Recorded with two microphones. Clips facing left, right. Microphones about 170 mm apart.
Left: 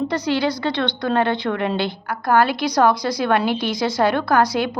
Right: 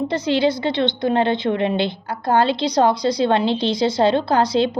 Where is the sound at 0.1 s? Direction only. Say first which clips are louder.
Right 2 dB; 25° right (ahead or behind).